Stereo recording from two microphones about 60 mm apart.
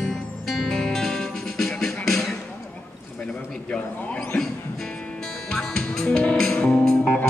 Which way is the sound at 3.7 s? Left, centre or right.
Centre.